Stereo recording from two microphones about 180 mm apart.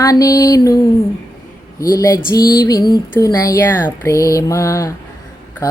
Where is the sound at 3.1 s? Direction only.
20° left (ahead or behind).